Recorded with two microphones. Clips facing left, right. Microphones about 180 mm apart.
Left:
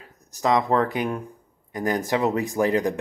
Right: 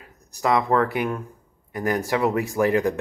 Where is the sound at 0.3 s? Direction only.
20° left (ahead or behind).